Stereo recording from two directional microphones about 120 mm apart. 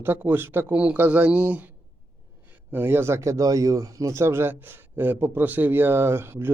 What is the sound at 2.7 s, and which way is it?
Speech, 15° right (ahead or behind).